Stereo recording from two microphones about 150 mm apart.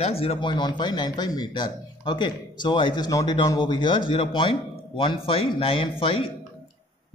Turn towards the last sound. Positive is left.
turn(degrees=35)  # may be behind; listen again after turning